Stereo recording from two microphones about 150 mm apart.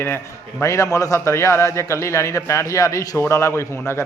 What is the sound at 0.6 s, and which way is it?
A man's voice, 20° left (ahead or behind).